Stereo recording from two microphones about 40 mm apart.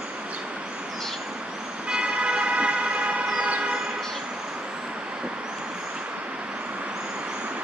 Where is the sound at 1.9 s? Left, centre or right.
Right.